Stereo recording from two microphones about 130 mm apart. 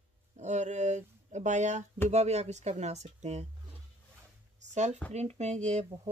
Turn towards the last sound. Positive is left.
turn(degrees=-60)  # may be behind; listen again after turning